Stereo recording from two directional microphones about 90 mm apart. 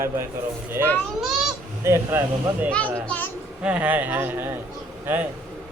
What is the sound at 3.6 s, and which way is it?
Speech, 15° right (ahead or behind).